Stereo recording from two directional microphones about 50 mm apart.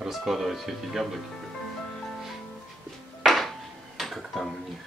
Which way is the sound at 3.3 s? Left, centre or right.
Centre.